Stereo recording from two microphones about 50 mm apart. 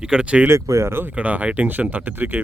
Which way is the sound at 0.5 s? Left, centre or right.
Right.